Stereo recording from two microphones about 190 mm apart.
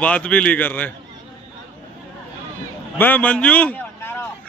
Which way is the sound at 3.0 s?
10° left (ahead or behind).